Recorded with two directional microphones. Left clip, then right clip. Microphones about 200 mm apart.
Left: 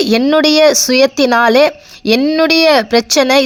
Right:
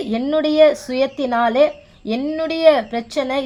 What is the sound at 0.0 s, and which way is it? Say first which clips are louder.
Speech: left 9 dB; 35° left (ahead or behind).